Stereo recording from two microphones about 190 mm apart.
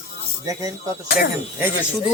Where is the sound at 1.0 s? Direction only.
55° left (ahead or behind).